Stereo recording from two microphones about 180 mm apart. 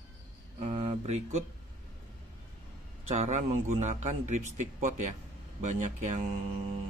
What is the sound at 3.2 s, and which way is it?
Speech, 40° right (ahead or behind).